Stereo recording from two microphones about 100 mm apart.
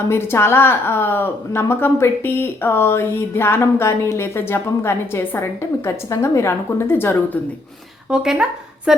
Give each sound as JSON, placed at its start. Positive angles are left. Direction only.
{"t": 0.1, "sound": "a woman's voice", "side_deg": 25}
{"t": 8.1, "sound": "speech", "side_deg": -5}